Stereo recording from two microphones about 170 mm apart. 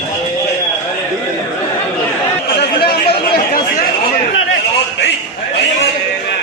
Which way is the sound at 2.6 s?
65° left (ahead or behind).